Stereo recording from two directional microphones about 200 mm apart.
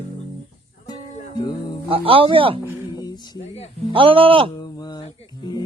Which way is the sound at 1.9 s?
25° right (ahead or behind).